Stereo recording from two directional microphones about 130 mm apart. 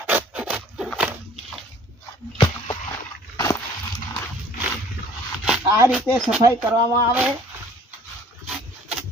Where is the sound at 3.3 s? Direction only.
25° left (ahead or behind).